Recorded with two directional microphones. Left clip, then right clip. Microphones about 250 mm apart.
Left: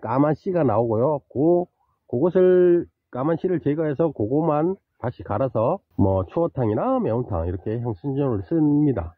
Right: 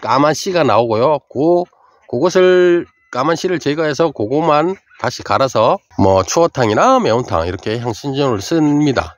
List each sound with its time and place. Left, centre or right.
0.0 s speech: centre
5.9 s speech: right